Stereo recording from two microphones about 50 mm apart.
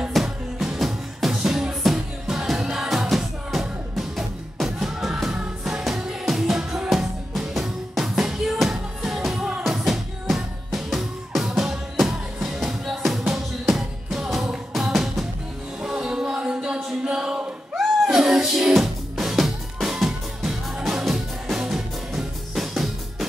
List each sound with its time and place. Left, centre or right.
0.1 s music: centre